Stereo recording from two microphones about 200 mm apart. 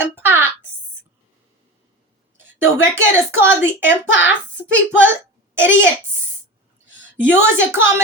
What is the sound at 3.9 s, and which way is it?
Speech, 60° left (ahead or behind).